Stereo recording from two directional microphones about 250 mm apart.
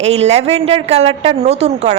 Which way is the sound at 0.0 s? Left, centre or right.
Right.